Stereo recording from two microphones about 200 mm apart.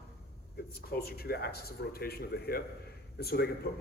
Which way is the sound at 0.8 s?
50° left (ahead or behind).